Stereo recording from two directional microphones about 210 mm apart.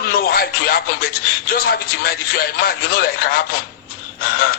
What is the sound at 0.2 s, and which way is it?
Speech, 45° left (ahead or behind).